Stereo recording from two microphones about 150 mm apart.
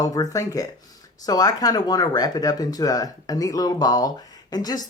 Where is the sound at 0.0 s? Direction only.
25° left (ahead or behind).